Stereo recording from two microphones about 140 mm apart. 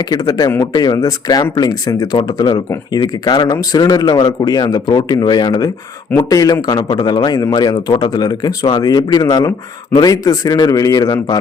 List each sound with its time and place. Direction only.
0.0 s speech: 30° left (ahead or behind)